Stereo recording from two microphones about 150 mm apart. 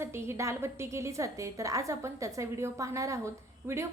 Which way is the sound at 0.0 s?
15° right (ahead or behind).